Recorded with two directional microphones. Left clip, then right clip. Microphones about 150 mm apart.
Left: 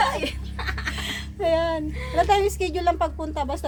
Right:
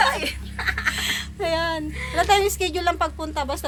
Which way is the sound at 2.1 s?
Centre (ahead or behind).